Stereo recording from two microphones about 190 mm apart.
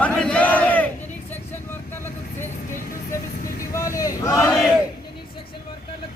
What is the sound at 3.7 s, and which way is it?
Crowd, 15° left (ahead or behind).